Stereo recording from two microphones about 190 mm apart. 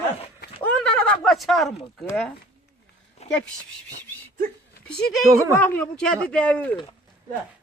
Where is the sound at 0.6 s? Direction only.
5° left (ahead or behind).